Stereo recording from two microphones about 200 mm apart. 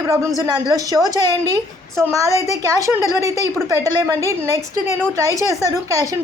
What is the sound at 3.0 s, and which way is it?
Speech, 15° left (ahead or behind).